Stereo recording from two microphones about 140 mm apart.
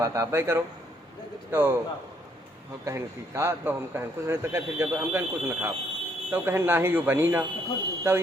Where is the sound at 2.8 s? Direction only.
20° right (ahead or behind).